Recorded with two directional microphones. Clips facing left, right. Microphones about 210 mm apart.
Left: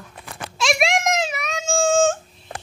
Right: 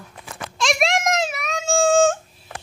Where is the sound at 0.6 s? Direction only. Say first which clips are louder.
Even; 5° left (ahead or behind).